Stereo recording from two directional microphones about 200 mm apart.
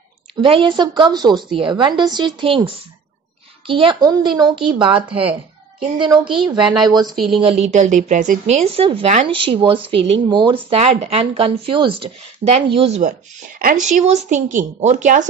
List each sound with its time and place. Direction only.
0.4 s speech: 25° right (ahead or behind)
6.6 s speech: 20° right (ahead or behind)
7.3 s speech: 30° right (ahead or behind)
13.6 s a woman's voice: 45° right (ahead or behind)